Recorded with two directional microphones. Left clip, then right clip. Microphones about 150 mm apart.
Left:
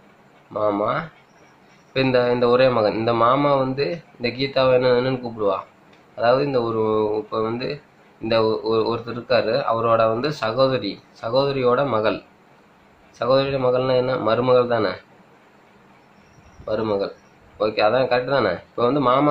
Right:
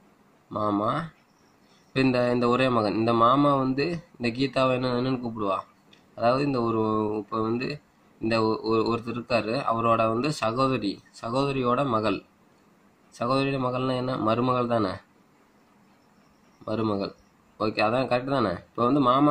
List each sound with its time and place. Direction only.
0.5 s speech: 45° right (ahead or behind)
2.1 s speech: 50° right (ahead or behind)
13.2 s speech: 45° right (ahead or behind)
16.6 s speech: 45° right (ahead or behind)